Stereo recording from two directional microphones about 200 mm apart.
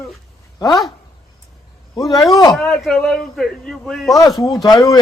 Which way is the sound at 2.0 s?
20° left (ahead or behind).